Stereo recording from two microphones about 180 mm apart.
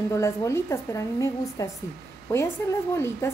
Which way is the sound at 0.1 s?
15° left (ahead or behind).